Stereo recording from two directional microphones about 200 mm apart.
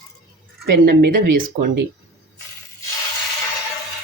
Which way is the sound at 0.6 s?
50° right (ahead or behind).